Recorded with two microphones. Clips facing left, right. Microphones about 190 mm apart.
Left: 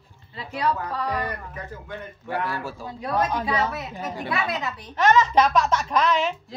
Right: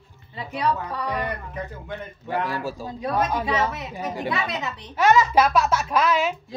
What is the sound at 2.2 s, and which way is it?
A woman's voice, 15° right (ahead or behind).